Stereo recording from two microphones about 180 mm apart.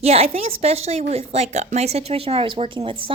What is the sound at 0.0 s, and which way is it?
A woman's voice, 35° right (ahead or behind).